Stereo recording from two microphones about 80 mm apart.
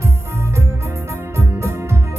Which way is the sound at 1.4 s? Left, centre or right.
Right.